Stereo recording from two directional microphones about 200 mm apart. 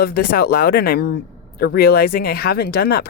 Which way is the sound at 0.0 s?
50° left (ahead or behind).